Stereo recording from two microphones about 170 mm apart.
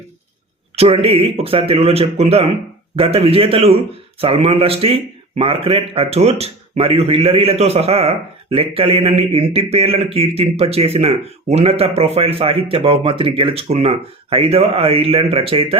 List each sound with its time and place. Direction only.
0.8 s speech: 35° right (ahead or behind)